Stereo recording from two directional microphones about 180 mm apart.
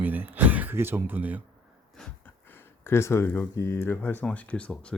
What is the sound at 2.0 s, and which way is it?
Speech, 10° left (ahead or behind).